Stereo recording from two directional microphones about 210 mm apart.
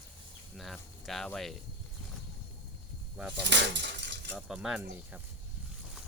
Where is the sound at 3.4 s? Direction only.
55° right (ahead or behind).